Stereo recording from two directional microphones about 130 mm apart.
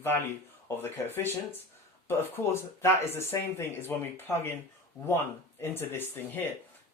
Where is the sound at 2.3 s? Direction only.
20° left (ahead or behind).